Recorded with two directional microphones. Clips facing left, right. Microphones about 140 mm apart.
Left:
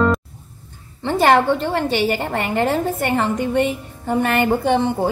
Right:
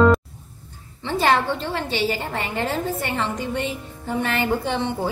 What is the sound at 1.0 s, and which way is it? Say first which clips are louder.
A woman's voice: left 5 dB; 55° left (ahead or behind).